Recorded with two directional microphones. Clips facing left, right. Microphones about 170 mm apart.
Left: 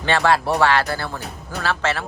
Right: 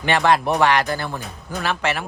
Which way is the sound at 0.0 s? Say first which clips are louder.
Right 1 dB; 15° right (ahead or behind).